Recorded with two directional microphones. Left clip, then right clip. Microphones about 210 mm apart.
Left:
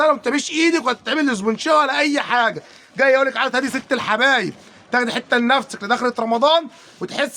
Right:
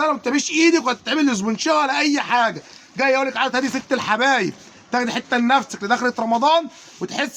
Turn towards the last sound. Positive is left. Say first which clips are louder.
# left 2 dB
turn(degrees=15)  # may be behind; listen again after turning